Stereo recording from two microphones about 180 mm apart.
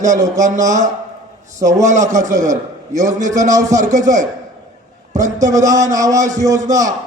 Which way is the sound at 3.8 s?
40° right (ahead or behind).